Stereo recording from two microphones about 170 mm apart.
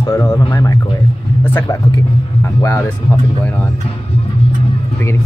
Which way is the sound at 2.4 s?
15° left (ahead or behind).